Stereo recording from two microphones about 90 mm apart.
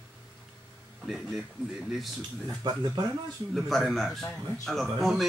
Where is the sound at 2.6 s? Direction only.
50° right (ahead or behind).